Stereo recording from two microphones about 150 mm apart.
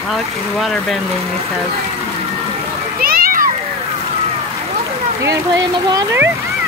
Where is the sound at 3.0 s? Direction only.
75° right (ahead or behind).